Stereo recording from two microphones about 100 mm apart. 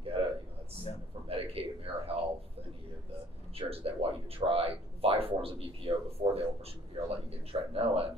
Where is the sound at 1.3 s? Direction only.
75° right (ahead or behind).